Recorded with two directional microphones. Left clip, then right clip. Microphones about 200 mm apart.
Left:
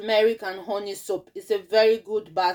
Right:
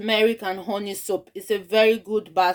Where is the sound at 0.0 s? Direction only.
50° right (ahead or behind).